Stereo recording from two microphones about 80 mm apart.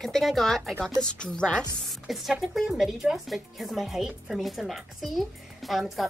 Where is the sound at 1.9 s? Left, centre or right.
Centre.